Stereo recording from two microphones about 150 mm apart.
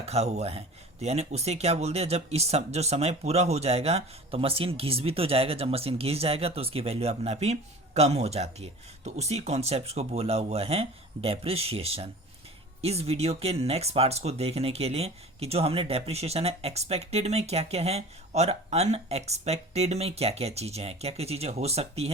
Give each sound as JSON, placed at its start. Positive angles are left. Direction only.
{"t": 0.0, "sound": "speech", "side_deg": -45}